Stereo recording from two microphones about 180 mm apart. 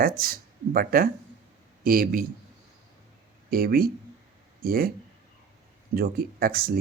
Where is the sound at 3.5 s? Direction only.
55° right (ahead or behind).